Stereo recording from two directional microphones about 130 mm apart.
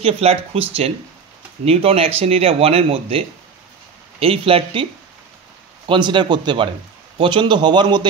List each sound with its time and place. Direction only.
0.0 s speech: 50° right (ahead or behind)
5.9 s a man's voice: 35° right (ahead or behind)